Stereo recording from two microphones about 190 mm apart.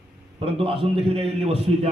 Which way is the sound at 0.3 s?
30° right (ahead or behind).